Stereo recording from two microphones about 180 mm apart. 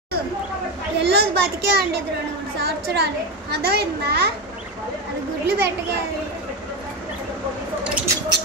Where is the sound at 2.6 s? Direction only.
65° right (ahead or behind).